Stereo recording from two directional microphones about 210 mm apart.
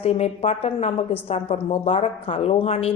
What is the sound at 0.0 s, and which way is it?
A woman's voice, 30° left (ahead or behind).